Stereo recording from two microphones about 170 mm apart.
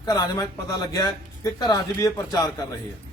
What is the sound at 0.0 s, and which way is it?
Speech, 20° left (ahead or behind).